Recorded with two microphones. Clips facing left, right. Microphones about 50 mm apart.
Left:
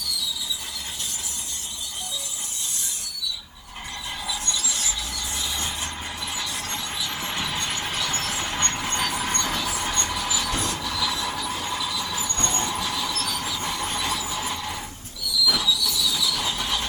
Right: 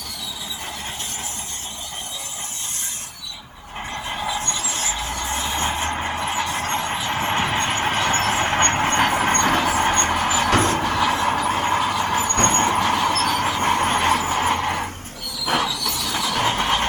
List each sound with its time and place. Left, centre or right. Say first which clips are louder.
0.0 s train: left 2 dB; right
4.1 s a sound: right 5 dB; right
10.6 s train: right 8 dB; right